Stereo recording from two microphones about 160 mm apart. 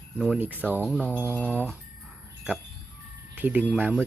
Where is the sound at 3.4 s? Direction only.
10° right (ahead or behind).